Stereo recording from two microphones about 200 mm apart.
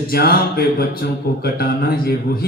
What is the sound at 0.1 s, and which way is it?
Speech, 50° left (ahead or behind).